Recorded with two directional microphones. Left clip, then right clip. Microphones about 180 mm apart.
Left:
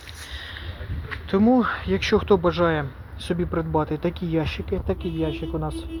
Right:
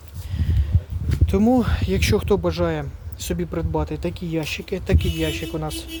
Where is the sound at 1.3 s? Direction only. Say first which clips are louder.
Even; 20° right (ahead or behind).